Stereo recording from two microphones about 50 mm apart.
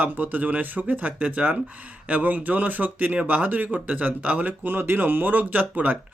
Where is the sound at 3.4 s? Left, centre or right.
Right.